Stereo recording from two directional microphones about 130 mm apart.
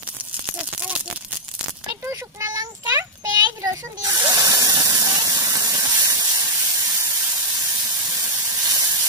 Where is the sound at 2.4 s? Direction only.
25° right (ahead or behind).